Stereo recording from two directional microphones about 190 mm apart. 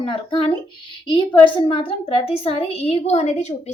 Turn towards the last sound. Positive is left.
turn(degrees=35)  # may be behind; listen again after turning